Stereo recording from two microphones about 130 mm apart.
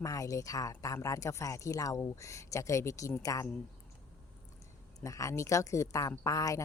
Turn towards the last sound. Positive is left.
turn(degrees=25)  # may be behind; listen again after turning